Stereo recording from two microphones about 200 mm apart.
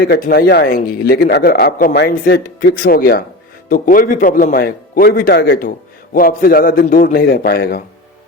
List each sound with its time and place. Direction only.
0.0 s a man's voice: 55° left (ahead or behind)